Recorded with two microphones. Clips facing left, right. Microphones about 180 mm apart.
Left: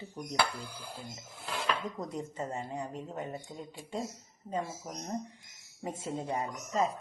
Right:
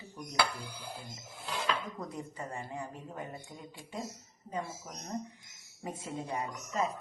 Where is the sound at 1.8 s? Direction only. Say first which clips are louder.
Left 3 dB; 25° left (ahead or behind).